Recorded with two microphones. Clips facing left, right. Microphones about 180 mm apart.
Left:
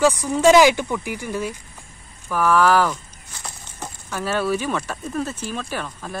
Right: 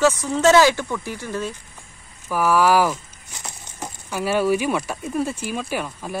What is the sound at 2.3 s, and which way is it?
Speech, 10° right (ahead or behind).